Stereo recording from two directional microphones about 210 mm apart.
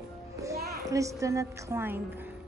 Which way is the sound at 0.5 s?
45° right (ahead or behind).